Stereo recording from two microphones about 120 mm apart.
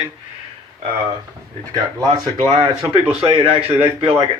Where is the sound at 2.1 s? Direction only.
40° right (ahead or behind).